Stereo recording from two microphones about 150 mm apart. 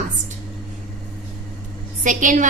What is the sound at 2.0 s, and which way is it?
Speech, 60° right (ahead or behind).